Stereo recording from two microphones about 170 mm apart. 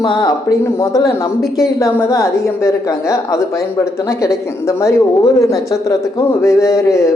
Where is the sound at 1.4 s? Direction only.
Centre (ahead or behind).